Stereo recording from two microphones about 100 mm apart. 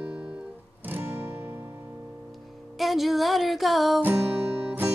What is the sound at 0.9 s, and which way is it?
Music, 20° right (ahead or behind).